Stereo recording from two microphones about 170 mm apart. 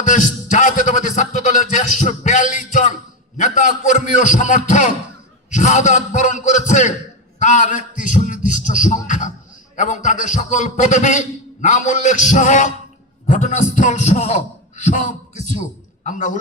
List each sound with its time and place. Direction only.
0.0 s music: 50° left (ahead or behind)
3.3 s a man's voice: 45° left (ahead or behind)